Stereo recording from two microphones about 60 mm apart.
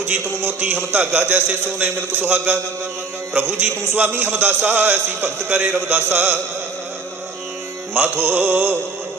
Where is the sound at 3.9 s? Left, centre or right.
Right.